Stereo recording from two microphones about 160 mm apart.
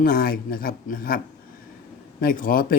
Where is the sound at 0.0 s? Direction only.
65° left (ahead or behind).